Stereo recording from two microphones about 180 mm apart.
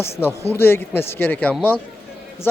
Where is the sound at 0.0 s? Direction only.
10° left (ahead or behind).